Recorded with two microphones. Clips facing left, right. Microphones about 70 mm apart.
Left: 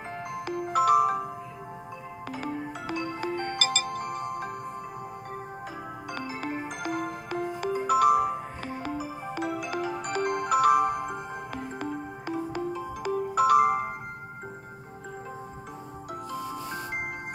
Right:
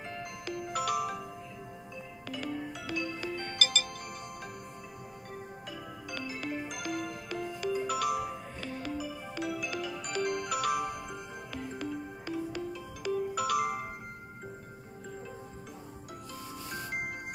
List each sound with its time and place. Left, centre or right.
0.1 s music: left
2.3 s music: left
6.1 s music: left